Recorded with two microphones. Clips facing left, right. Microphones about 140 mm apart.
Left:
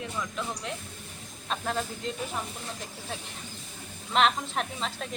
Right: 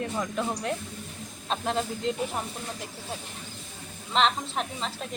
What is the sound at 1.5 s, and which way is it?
Speech, 25° right (ahead or behind).